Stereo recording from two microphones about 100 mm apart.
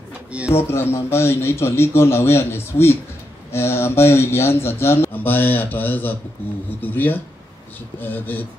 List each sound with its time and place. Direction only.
0.5 s speech: 25° left (ahead or behind)